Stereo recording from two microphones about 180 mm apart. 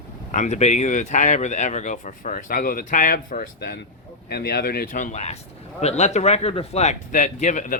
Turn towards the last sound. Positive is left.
turn(degrees=45)  # may be behind; listen again after turning